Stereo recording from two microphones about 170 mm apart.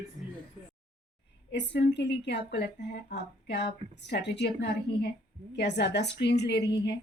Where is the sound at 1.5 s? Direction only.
85° left.